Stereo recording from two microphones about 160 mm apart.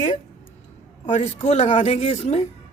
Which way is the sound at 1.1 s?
45° left (ahead or behind).